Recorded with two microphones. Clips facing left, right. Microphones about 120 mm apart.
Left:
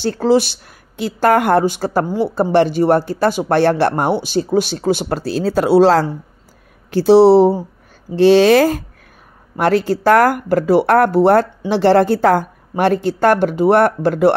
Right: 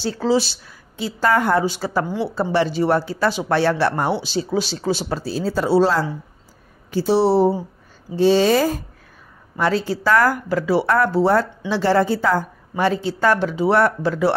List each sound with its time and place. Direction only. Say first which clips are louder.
0.0 s a woman's voice: left 5 dB; 55° left (ahead or behind); by 7.5 s 90° left
8.2 s speech: left 6 dB; 75° left (ahead or behind)
9.6 s a woman's voice: left 5 dB; 60° left (ahead or behind)